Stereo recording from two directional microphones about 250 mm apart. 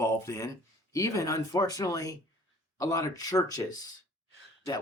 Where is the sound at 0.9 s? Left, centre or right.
Centre.